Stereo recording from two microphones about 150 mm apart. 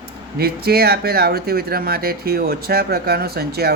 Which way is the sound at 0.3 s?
90° right.